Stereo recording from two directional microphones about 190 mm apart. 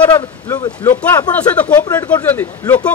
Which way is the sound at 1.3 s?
5° left (ahead or behind).